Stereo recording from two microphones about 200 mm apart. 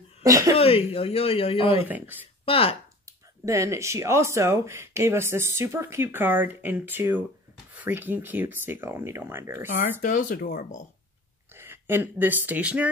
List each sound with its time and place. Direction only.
0.2 s speech: 15° right (ahead or behind)
0.6 s speech: 30° left (ahead or behind)
1.9 s speech: 10° right (ahead or behind)
2.4 s speech: 30° left (ahead or behind)
3.4 s speech: 15° right (ahead or behind)
10.0 s speech: 45° left (ahead or behind)
11.5 s speech: 10° right (ahead or behind)